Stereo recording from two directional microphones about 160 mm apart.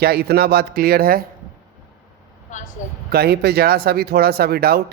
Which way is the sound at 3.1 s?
85° right.